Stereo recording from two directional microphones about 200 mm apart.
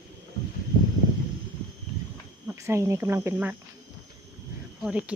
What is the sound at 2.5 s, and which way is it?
Speech, 15° right (ahead or behind).